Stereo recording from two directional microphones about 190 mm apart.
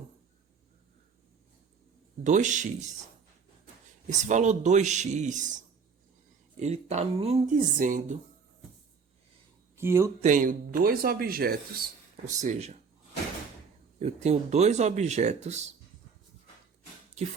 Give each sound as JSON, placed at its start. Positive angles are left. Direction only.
{"t": 2.2, "sound": "speech", "side_deg": -40}
{"t": 4.0, "sound": "speech", "side_deg": -40}
{"t": 6.6, "sound": "speech", "side_deg": -35}
{"t": 9.7, "sound": "speech", "side_deg": -15}
{"t": 10.2, "sound": "speech", "side_deg": -40}
{"t": 12.3, "sound": "speech", "side_deg": -40}
{"t": 14.0, "sound": "speech", "side_deg": -35}